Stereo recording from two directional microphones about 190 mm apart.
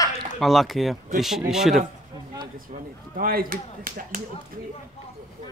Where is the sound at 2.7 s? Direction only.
40° right (ahead or behind).